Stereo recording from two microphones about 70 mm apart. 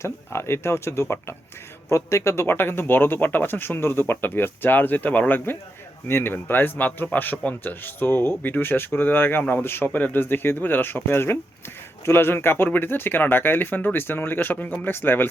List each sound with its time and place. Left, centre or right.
0.0 s speech: left